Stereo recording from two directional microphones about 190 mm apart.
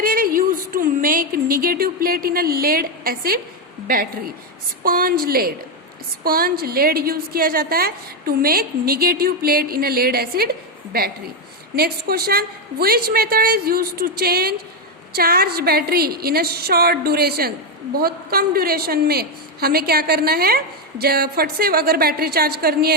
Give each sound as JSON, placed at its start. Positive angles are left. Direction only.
{"t": 0.0, "sound": "speech", "side_deg": -50}
{"t": 4.8, "sound": "a woman's voice", "side_deg": -50}